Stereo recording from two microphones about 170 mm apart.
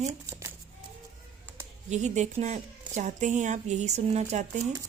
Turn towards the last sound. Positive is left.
turn(degrees=-45)  # may be behind; listen again after turning